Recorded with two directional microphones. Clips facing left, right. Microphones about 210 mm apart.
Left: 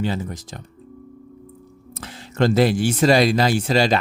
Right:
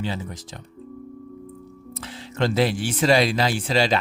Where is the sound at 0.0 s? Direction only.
45° left (ahead or behind).